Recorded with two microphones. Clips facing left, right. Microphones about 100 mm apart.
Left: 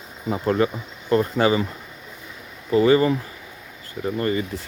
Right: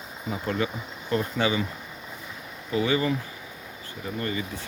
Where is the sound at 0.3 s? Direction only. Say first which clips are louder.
Left 7 dB; 40° left (ahead or behind).